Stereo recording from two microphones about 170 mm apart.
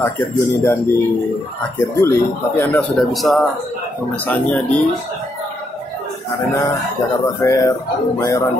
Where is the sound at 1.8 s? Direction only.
15° left (ahead or behind).